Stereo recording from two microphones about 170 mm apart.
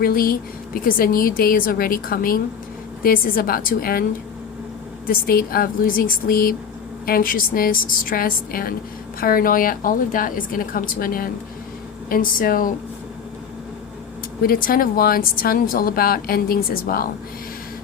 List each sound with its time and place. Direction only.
0.0 s speech: 60° left (ahead or behind)
5.0 s speech: 60° left (ahead or behind)
14.4 s speech: 60° left (ahead or behind)